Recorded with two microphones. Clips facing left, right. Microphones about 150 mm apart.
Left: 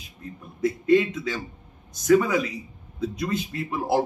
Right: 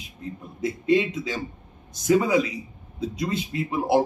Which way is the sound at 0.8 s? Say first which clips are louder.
Left 1 dB; 20° right (ahead or behind).